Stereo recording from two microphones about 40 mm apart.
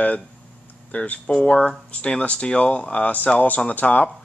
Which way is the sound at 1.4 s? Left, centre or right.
Left.